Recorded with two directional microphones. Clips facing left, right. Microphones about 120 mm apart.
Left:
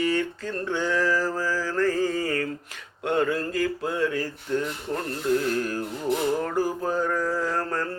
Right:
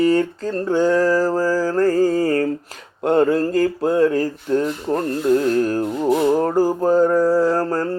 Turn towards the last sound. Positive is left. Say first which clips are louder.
# right 9 dB
turn(degrees=-35)  # may be behind; listen again after turning